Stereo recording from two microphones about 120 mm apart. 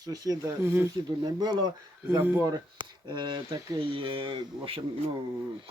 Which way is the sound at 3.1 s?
40° right (ahead or behind).